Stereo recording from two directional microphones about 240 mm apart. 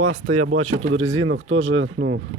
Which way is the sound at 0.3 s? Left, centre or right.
Right.